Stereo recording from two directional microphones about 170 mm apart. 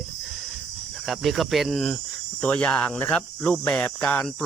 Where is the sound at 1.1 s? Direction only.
Centre (ahead or behind).